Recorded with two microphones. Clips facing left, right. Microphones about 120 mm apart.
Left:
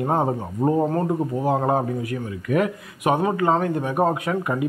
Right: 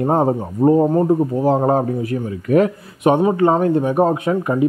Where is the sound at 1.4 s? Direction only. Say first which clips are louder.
Right 2 dB; 30° right (ahead or behind).